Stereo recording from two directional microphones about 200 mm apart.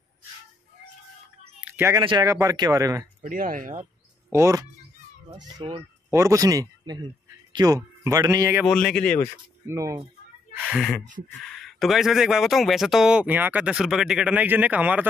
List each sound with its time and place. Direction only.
1.6 s a sound: 10° right (ahead or behind)
2.0 s speech: 20° right (ahead or behind)
3.3 s speech: 45° right (ahead or behind)
4.3 s speech: 15° right (ahead or behind)
5.6 s speech: 25° right (ahead or behind)
6.1 s speech: 15° right (ahead or behind)
8.6 s speech: 5° left (ahead or behind)
9.7 s speech: 15° right (ahead or behind)
10.7 s speech: centre (ahead or behind)